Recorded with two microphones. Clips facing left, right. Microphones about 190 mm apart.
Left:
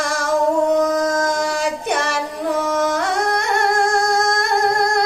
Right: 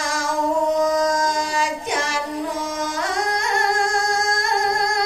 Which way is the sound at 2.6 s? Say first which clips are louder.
Left 6 dB; 65° left (ahead or behind).